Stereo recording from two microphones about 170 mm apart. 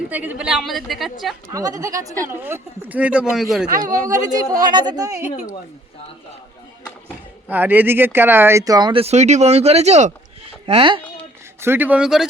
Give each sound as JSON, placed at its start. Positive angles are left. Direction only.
{"t": 0.1, "sound": "a woman's voice", "side_deg": -10}
{"t": 1.5, "sound": "speech", "side_deg": -20}
{"t": 4.1, "sound": "speech", "side_deg": -20}
{"t": 7.4, "sound": "speech", "side_deg": -10}
{"t": 11.6, "sound": "speech", "side_deg": -10}